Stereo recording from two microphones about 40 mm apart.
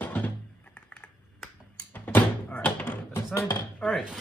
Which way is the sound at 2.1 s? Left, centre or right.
Left.